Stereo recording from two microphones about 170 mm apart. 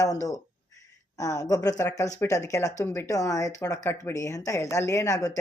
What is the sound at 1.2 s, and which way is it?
A woman's voice, 20° left (ahead or behind).